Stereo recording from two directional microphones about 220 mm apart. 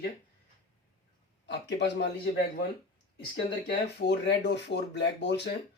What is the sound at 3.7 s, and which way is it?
Speech, 50° left (ahead or behind).